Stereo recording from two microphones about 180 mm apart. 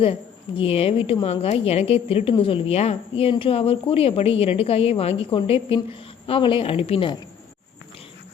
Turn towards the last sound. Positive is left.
turn(degrees=30)  # may be behind; listen again after turning